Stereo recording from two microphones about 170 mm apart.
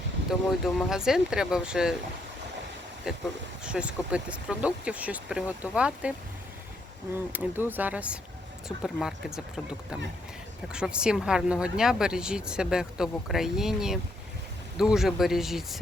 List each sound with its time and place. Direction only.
0.3 s speech: centre (ahead or behind)
3.1 s speech: 5° right (ahead or behind)
7.3 s speech: 10° right (ahead or behind)